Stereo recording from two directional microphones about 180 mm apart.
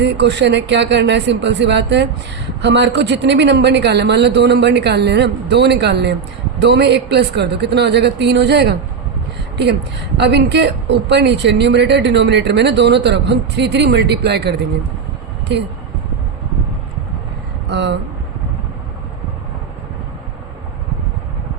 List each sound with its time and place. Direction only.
0.0 s speech: 75° right (ahead or behind)
10.2 s speech: 70° right (ahead or behind)
17.7 s speech: 70° right (ahead or behind)